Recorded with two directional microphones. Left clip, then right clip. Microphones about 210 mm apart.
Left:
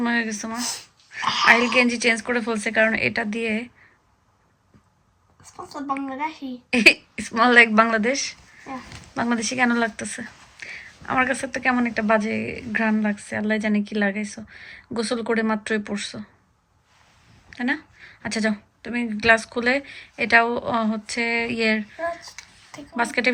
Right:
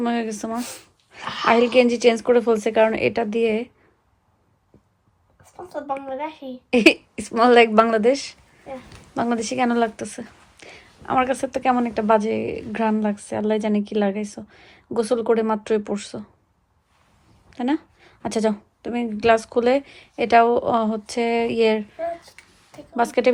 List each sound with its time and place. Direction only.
0.0 s a woman's voice: 5° right (ahead or behind)
1.2 s a woman's voice: 10° left (ahead or behind)
1.5 s a woman's voice: 5° right (ahead or behind)
6.1 s a woman's voice: 10° left (ahead or behind)
6.7 s a woman's voice: 5° right (ahead or behind)
17.5 s a woman's voice: 5° right (ahead or behind)
22.3 s a sound: 10° left (ahead or behind)
23.0 s a woman's voice: 5° right (ahead or behind)